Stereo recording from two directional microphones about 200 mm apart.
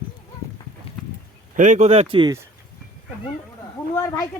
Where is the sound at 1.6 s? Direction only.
40° right (ahead or behind).